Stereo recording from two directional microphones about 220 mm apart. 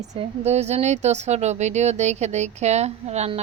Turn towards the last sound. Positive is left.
turn(degrees=-30)  # may be behind; listen again after turning